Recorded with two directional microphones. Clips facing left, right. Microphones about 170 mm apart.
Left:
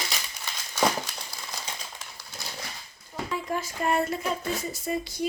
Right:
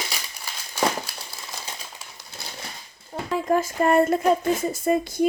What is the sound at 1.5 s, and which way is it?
Typewriter, 5° right (ahead or behind).